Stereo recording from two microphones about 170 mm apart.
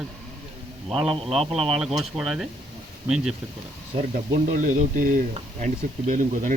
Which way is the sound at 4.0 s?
45° right (ahead or behind).